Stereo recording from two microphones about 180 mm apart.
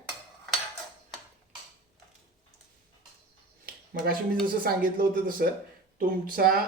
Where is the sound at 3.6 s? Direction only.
55° right (ahead or behind).